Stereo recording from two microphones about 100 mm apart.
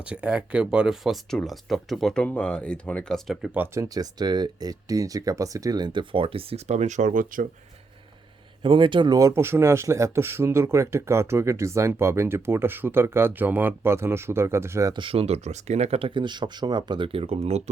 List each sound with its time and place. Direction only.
0.0 s speech: 10° right (ahead or behind); by 3.5 s 5° left (ahead or behind)
3.8 s speech: 40° right (ahead or behind); by 6.8 s 70° right (ahead or behind)
8.6 s speech: 60° right (ahead or behind)
9.1 s speech: 30° right (ahead or behind)
14.9 s speech: 65° right (ahead or behind); by 17.6 s 90° right